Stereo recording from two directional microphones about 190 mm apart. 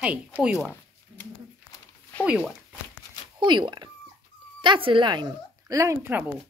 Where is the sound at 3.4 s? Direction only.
25° right (ahead or behind).